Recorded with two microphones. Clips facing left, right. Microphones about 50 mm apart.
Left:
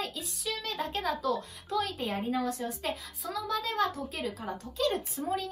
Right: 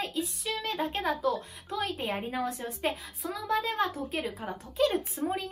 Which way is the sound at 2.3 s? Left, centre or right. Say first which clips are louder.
Left 1 dB; right.